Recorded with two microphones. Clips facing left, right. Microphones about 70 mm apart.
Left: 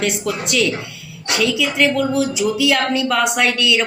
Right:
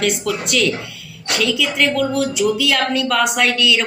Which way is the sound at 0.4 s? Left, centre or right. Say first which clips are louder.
Even; centre.